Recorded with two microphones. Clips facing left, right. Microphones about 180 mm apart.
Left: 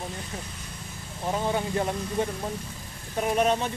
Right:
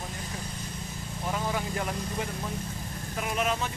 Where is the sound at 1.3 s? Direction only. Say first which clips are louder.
Left 5 dB; 30° left (ahead or behind).